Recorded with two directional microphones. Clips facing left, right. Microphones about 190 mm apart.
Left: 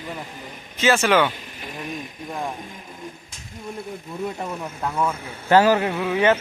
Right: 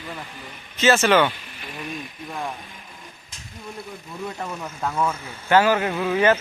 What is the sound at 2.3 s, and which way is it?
Speech, 20° left (ahead or behind).